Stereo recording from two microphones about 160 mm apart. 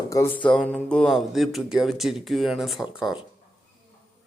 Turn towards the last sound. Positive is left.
turn(degrees=0)  # may be behind; listen again after turning